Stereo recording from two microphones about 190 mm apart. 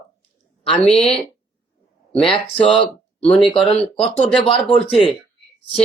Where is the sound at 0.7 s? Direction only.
5° left (ahead or behind).